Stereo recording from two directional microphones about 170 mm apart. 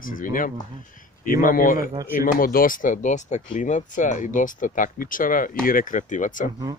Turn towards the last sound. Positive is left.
turn(degrees=50)  # may be behind; listen again after turning